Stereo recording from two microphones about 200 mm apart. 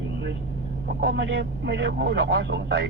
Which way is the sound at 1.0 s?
55° right (ahead or behind).